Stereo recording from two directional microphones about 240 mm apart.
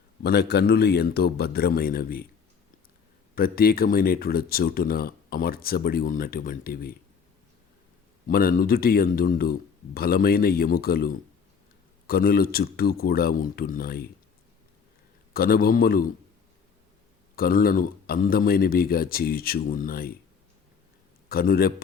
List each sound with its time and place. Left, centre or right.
0.2 s speech: left
3.3 s speech: left
8.3 s speech: left
15.3 s speech: left
17.3 s speech: left
21.2 s a man's voice: left